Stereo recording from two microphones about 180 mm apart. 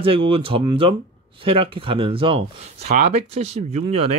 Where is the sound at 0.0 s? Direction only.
30° right (ahead or behind).